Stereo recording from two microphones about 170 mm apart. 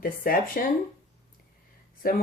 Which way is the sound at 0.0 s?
55° left (ahead or behind).